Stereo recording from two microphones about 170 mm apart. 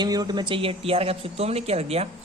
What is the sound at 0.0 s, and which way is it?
Speech, 25° right (ahead or behind).